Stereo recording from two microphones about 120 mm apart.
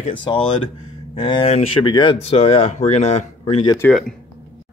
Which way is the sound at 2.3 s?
55° left (ahead or behind).